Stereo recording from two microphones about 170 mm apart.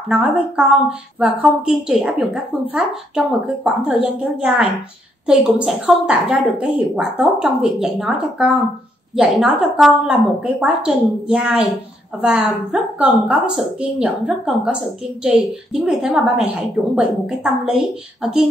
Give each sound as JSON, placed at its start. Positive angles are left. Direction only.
{"t": 0.1, "sound": "a woman's voice", "side_deg": -5}